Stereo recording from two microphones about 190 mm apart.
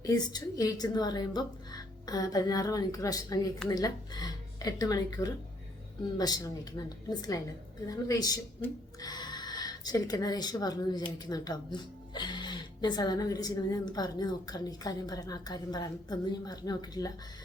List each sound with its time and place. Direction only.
0.0 s speech: 20° left (ahead or behind)